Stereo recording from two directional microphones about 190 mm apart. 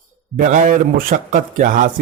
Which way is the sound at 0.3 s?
40° right (ahead or behind).